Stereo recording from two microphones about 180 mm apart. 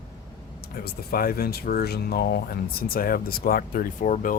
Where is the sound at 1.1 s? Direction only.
55° left (ahead or behind).